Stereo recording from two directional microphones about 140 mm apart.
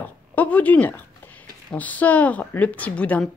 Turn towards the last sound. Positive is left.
turn(degrees=10)  # may be behind; listen again after turning